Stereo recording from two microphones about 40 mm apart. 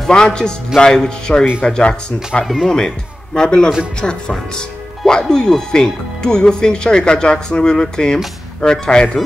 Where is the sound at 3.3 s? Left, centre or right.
Left.